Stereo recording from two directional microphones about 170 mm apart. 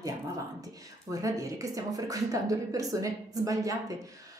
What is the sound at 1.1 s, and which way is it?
Speech, 20° right (ahead or behind).